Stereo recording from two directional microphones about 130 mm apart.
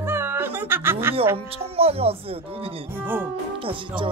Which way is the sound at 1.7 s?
50° right (ahead or behind).